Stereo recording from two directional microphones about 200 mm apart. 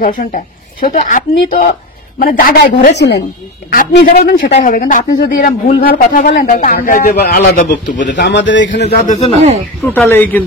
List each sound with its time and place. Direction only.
0.0 s a woman's voice: 45° left (ahead or behind)
3.0 s speech: 60° left (ahead or behind)
3.7 s speech: 45° left (ahead or behind)
4.6 s speech: 40° left (ahead or behind)
8.1 s speech: 60° left (ahead or behind)
9.0 s speech: 35° left (ahead or behind)
9.8 s speech: 10° left (ahead or behind)